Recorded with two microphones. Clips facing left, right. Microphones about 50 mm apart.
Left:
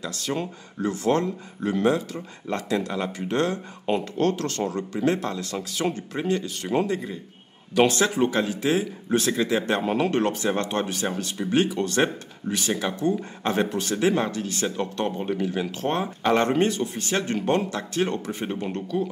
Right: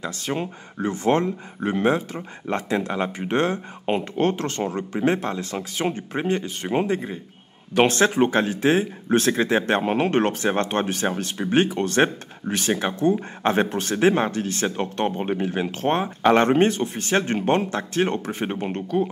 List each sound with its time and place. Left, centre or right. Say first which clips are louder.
0.0 s speech: right 1 dB; right